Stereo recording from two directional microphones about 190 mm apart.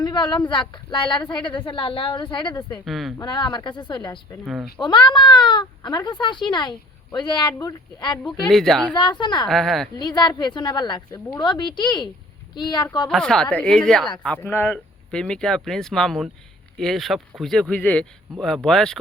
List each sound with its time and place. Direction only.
0.0 s speech: 25° left (ahead or behind)
2.7 s speech: centre (ahead or behind)
3.2 s speech: 25° left (ahead or behind)
8.2 s speech: centre (ahead or behind)
9.0 s speech: 25° left (ahead or behind)
9.5 s speech: centre (ahead or behind)
10.0 s speech: 20° left (ahead or behind)
13.1 s speech: 5° left (ahead or behind)